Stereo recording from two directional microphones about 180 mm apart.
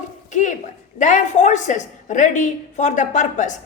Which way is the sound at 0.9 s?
45° left (ahead or behind).